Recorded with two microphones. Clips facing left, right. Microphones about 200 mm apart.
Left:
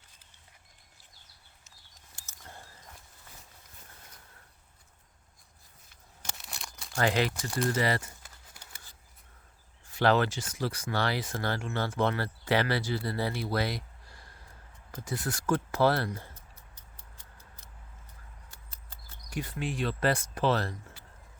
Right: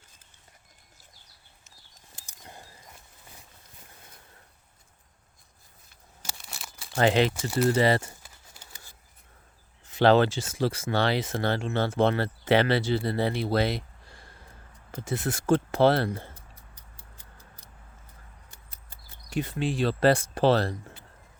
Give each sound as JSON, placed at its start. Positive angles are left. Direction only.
{"t": 2.1, "sound": "a sound", "side_deg": -15}
{"t": 6.3, "sound": "crumpling", "side_deg": 0}
{"t": 6.9, "sound": "speech", "side_deg": -25}
{"t": 9.8, "sound": "speech", "side_deg": -25}
{"t": 16.7, "sound": "a sound", "side_deg": -15}
{"t": 19.3, "sound": "speech", "side_deg": -25}